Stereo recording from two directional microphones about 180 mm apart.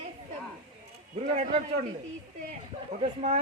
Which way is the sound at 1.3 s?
40° right (ahead or behind).